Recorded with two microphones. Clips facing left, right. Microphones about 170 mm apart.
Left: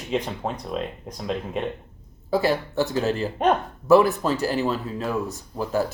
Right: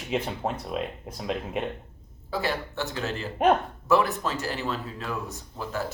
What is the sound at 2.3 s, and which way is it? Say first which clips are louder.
Speech: left 7 dB; 40° left (ahead or behind).